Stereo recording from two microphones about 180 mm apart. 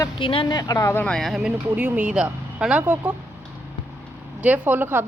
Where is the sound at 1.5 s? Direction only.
10° right (ahead or behind).